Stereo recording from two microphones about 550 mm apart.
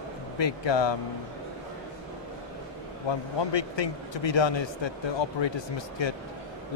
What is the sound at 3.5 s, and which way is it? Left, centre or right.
Speech, left.